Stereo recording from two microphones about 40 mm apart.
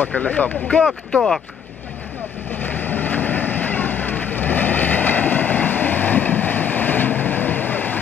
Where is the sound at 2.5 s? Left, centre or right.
Left.